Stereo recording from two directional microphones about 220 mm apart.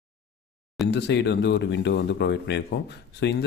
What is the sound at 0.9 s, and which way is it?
Speech, 50° left (ahead or behind).